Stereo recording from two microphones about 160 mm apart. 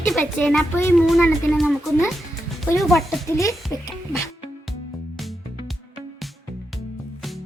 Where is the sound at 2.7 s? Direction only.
Centre (ahead or behind).